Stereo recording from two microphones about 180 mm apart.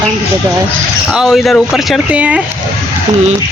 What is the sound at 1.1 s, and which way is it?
Speech, centre (ahead or behind).